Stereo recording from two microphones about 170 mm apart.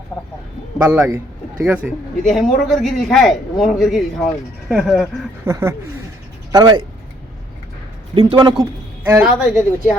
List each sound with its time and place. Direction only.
0.9 s a man's voice: 15° right (ahead or behind)
5.5 s speech: 15° right (ahead or behind)
8.1 s speech: 30° right (ahead or behind)
9.0 s speech: 10° right (ahead or behind)